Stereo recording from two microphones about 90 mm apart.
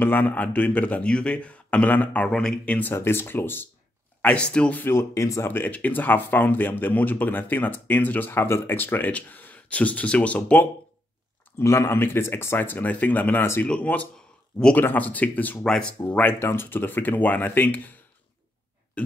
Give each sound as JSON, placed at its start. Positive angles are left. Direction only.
{"t": 0.0, "sound": "speech", "side_deg": 20}
{"t": 4.2, "sound": "speech", "side_deg": 10}
{"t": 5.5, "sound": "speech", "side_deg": 20}
{"t": 11.5, "sound": "speech", "side_deg": 30}
{"t": 15.6, "sound": "speech", "side_deg": 5}
{"t": 16.0, "sound": "speech", "side_deg": 20}
{"t": 19.0, "sound": "burping", "side_deg": 15}